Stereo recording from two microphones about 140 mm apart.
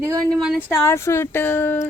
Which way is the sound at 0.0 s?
25° right (ahead or behind).